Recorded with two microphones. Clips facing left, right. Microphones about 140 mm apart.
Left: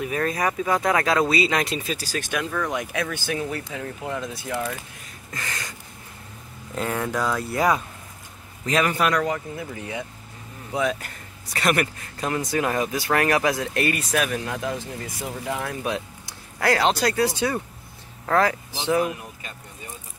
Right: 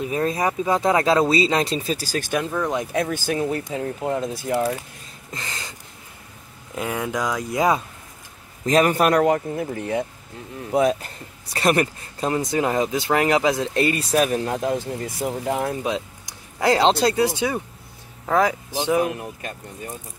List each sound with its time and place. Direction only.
0.0 s speech: 25° right (ahead or behind)
2.5 s speech: 25° right (ahead or behind)
5.3 s speech: 25° right (ahead or behind)
6.7 s speech: 10° right (ahead or behind)
8.6 s speech: 40° right (ahead or behind)
15.8 s speech: 15° right (ahead or behind)